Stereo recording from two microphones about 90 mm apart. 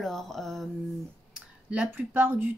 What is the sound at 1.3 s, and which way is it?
Speech, 10° right (ahead or behind).